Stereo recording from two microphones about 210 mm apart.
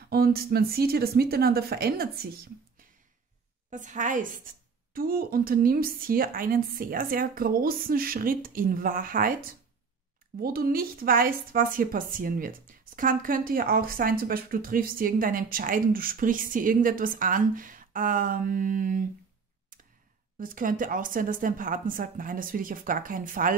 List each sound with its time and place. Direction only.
0.1 s a woman's voice: 45° right (ahead or behind)
3.7 s a woman's voice: 35° right (ahead or behind)
20.3 s speech: 40° right (ahead or behind)